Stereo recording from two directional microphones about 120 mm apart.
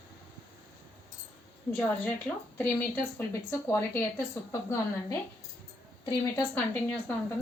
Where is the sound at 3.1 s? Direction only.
20° left (ahead or behind).